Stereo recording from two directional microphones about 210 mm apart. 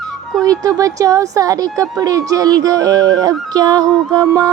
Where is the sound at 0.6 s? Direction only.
15° right (ahead or behind).